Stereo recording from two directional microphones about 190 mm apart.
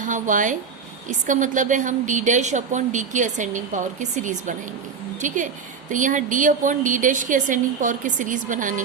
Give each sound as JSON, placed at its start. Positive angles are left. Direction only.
{"t": 0.0, "sound": "a woman's voice", "side_deg": -40}